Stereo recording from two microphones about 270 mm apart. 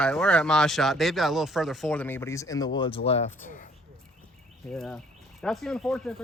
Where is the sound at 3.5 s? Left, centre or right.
Left.